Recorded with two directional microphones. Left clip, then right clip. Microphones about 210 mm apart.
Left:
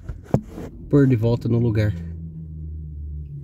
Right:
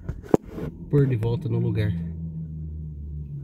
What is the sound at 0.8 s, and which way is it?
Speech, 60° left (ahead or behind).